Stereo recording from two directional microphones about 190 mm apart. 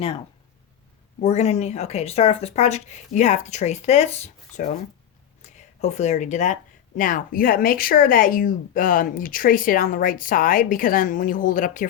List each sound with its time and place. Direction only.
1.2 s speech: 35° left (ahead or behind)